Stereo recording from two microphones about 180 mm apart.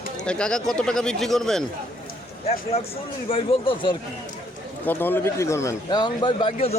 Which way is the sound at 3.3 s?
30° left (ahead or behind).